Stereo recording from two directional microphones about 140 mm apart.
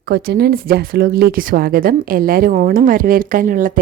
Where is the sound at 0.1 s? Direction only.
90° right.